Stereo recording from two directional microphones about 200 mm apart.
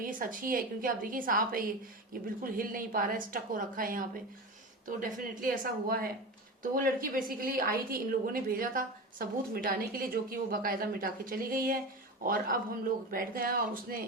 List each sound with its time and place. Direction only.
0.0 s a woman's voice: 45° right (ahead or behind)